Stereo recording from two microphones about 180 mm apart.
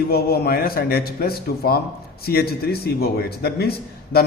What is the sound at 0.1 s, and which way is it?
A man's voice, 60° left (ahead or behind).